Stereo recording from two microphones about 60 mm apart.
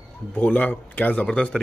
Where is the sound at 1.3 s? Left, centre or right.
Centre.